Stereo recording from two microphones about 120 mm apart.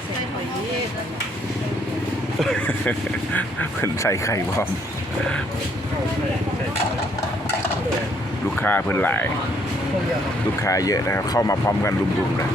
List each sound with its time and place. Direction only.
2.4 s speech: 10° left (ahead or behind); by 4.4 s 25° left (ahead or behind)
8.5 s speech: 15° left (ahead or behind)
10.6 s speech: 30° left (ahead or behind)